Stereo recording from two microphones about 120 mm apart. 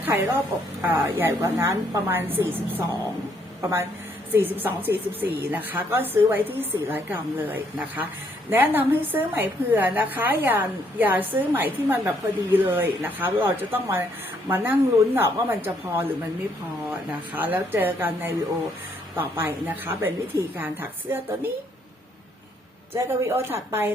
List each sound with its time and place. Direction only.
0.0 s a sound: 15° right (ahead or behind)
0.8 s a woman's voice: 20° right (ahead or behind)
17.3 s a woman's voice: 15° right (ahead or behind)
23.0 s a woman's voice: 20° right (ahead or behind)